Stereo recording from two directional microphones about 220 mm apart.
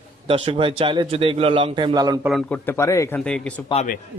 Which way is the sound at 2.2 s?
5° left (ahead or behind).